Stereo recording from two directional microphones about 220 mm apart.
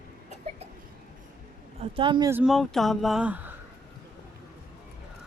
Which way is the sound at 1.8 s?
25° right (ahead or behind).